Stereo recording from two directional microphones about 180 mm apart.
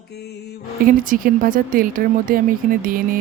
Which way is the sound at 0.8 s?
50° right (ahead or behind).